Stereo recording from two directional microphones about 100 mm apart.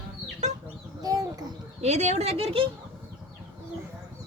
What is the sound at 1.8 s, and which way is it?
Speech, 90° right.